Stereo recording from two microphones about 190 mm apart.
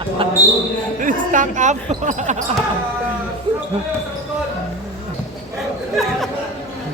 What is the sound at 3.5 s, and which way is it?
Basketball bounce, 25° right (ahead or behind).